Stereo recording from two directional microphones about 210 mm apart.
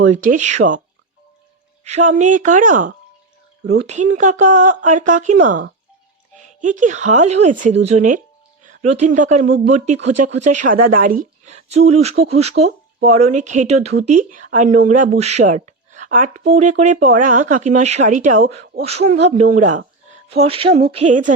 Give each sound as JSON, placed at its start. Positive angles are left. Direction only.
{"t": 0.0, "sound": "speech", "side_deg": -35}
{"t": 1.8, "sound": "speech", "side_deg": -35}
{"t": 3.6, "sound": "speech", "side_deg": -50}
{"t": 3.8, "sound": "speech", "side_deg": -35}